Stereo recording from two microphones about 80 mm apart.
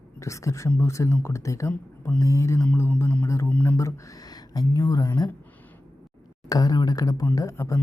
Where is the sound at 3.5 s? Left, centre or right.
Left.